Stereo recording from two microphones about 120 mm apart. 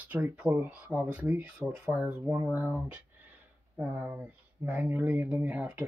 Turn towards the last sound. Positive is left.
turn(degrees=-10)  # may be behind; listen again after turning